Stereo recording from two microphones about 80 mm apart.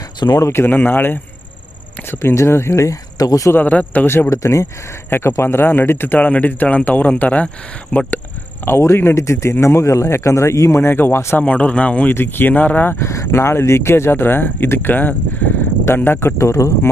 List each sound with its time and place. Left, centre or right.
0.3 s speech: left
3.2 s speech: left
3.5 s speech: centre
8.6 s speech: left
11.3 s speech: centre
13.1 s speech: left
16.4 s speech: left